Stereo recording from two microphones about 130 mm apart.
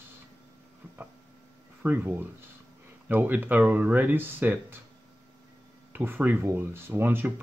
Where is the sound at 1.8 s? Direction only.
15° right (ahead or behind).